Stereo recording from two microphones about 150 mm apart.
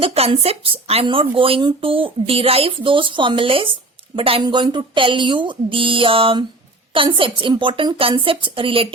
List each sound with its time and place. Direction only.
0.0 s speech: 40° right (ahead or behind)